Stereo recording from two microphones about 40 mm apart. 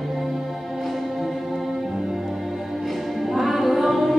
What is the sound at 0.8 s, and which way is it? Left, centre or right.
Music, centre.